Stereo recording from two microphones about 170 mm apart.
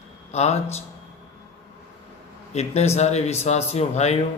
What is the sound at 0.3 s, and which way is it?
Speech, 40° left (ahead or behind).